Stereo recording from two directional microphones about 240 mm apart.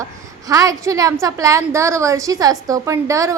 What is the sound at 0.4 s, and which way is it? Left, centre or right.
A woman's voice, centre.